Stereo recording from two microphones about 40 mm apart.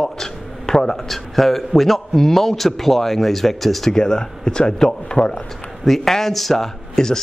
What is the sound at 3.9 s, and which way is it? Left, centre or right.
Speech, centre.